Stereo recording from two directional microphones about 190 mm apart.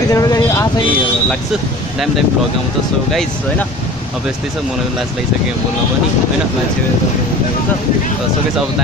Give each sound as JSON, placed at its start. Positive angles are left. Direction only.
{"t": 0.1, "sound": "vehicle", "side_deg": 20}